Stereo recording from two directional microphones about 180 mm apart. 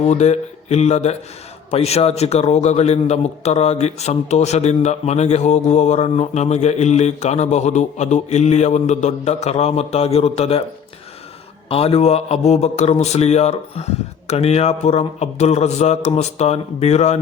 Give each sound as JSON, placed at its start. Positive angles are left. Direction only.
{"t": 0.1, "sound": "a man's voice", "side_deg": 40}
{"t": 11.7, "sound": "a man's voice", "side_deg": 35}